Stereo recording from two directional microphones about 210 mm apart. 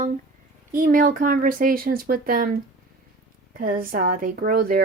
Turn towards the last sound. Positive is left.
turn(degrees=-45)  # may be behind; listen again after turning